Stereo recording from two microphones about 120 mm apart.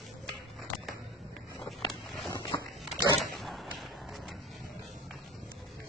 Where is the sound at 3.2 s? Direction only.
Centre (ahead or behind).